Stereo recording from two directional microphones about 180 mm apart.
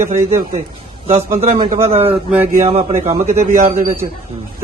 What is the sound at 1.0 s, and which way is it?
Speech, 35° right (ahead or behind).